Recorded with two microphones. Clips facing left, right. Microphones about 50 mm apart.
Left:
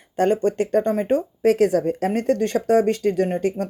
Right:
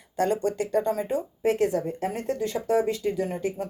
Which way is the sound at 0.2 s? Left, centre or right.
Left.